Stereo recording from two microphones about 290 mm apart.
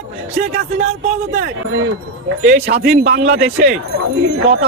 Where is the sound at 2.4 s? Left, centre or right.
Right.